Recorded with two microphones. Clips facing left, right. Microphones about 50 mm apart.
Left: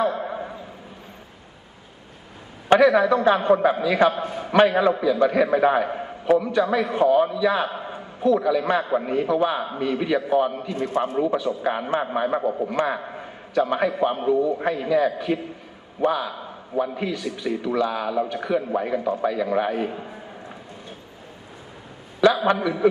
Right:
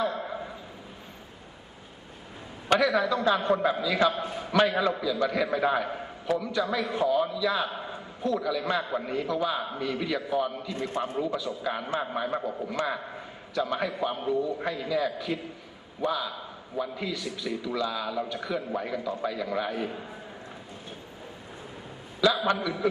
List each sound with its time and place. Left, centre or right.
0.0 s a sound: left
2.7 s a man's voice: left
5.8 s a man's voice: left
6.5 s a man's voice: left
13.5 s a man's voice: left
14.3 s a man's voice: left
19.2 s a man's voice: left
22.2 s a man's voice: left